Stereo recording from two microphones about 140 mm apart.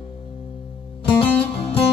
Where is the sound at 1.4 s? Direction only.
45° left (ahead or behind).